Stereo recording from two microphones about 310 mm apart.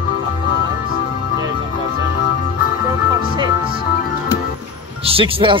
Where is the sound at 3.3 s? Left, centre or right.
Centre.